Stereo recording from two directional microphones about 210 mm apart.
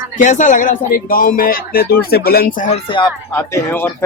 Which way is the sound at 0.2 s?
35° left (ahead or behind).